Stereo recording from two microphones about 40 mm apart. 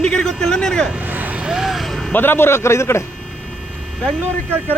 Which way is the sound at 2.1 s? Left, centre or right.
Left.